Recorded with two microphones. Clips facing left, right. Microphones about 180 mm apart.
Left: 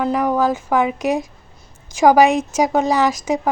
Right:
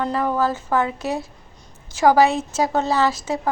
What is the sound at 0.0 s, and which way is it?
Speech, 15° left (ahead or behind).